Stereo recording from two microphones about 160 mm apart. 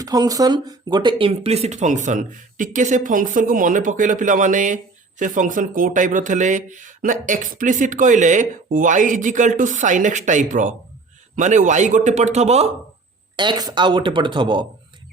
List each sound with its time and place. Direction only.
0.0 s speech: 20° right (ahead or behind); by 12.7 s 40° right (ahead or behind)
13.3 s speech: 30° right (ahead or behind)